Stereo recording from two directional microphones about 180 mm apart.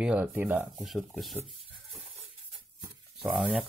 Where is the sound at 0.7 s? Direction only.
Centre (ahead or behind).